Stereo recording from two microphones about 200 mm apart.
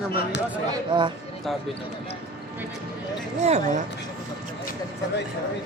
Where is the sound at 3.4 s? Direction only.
35° right (ahead or behind).